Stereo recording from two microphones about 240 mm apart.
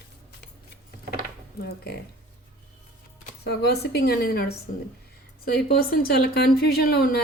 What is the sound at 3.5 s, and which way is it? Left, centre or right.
A woman's voice, left.